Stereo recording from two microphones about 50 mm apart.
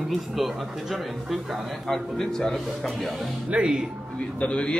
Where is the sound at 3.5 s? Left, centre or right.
Right.